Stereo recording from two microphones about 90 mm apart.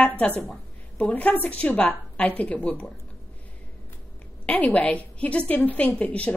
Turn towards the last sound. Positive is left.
turn(degrees=15)  # may be behind; listen again after turning